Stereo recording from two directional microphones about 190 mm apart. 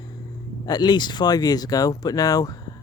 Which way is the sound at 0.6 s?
20° left (ahead or behind).